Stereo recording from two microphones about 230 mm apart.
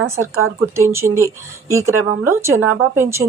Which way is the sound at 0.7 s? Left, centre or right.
Centre.